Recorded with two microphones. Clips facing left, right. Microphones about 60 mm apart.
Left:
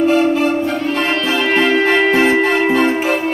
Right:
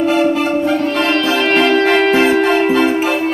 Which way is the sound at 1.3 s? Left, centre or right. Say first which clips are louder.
Even; right.